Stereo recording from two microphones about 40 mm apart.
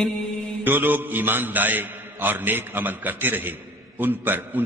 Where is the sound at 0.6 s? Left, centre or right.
Right.